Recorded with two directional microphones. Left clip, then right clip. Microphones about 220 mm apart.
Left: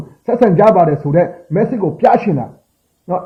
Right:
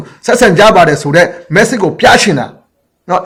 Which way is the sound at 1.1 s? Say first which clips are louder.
Right 6 dB; 15° right (ahead or behind).